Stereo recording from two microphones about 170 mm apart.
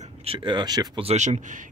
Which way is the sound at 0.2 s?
30° right (ahead or behind).